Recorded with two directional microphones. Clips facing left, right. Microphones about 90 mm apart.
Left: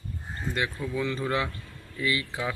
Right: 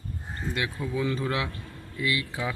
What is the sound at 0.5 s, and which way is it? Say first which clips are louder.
Speech: even; 5° right (ahead or behind).